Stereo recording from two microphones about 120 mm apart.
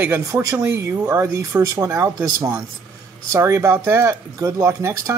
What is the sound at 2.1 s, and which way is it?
Speech, 30° right (ahead or behind).